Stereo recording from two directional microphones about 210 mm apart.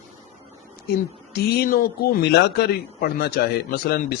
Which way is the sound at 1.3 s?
45° left (ahead or behind).